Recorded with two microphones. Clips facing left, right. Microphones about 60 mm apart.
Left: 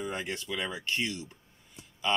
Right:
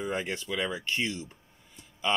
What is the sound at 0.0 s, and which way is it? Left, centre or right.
Speech, right.